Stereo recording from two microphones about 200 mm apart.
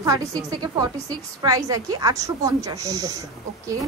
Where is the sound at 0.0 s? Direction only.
20° right (ahead or behind).